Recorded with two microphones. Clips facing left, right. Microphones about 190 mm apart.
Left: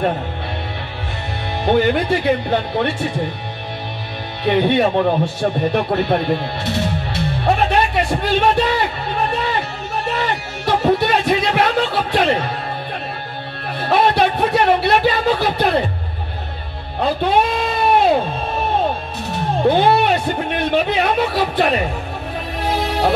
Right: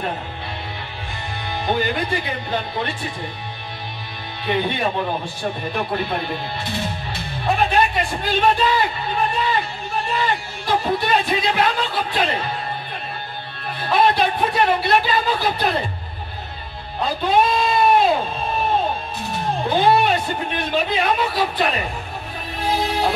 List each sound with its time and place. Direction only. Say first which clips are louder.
1.7 s speech: left 7 dB; 70° left (ahead or behind)
4.5 s speech: left 7 dB; 70° left (ahead or behind)
10.0 s music: left 2 dB; 70° left (ahead or behind)
13.7 s music: left 3 dB; 70° left (ahead or behind)
14.1 s speech: left 4 dB; 70° left (ahead or behind)
17.0 s speech: left 2 dB; 65° left (ahead or behind)
19.7 s speech: left 1 dB; 65° left (ahead or behind)